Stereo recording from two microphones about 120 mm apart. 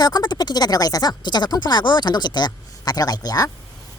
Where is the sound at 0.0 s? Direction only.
35° left (ahead or behind).